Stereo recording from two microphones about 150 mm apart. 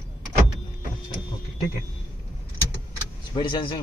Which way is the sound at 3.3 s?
35° left (ahead or behind).